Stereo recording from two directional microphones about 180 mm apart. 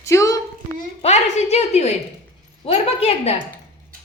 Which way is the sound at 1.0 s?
35° left (ahead or behind).